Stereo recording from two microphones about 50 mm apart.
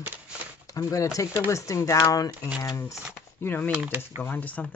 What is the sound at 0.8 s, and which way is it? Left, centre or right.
Speech, left.